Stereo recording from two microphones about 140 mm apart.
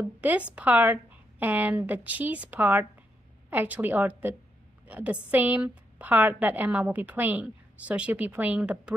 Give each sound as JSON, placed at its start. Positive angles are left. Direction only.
{"t": 0.0, "sound": "a woman's voice", "side_deg": -10}